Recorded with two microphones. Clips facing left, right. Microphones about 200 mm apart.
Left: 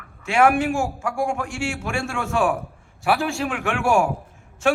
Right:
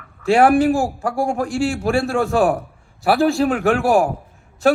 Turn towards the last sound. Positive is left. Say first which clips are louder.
# right 5 dB
turn(degrees=-35)  # may be behind; listen again after turning